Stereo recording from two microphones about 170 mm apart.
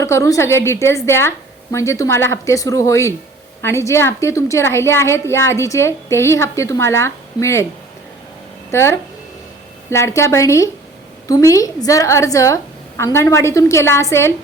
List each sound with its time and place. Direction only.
0.0 s a woman's voice: 20° left (ahead or behind)
8.7 s a woman's voice: 15° left (ahead or behind)